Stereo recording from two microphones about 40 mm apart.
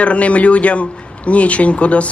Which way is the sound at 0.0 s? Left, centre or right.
Left.